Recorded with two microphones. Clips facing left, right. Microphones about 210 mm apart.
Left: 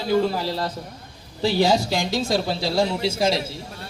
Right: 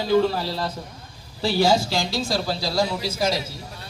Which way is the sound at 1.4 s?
15° left (ahead or behind).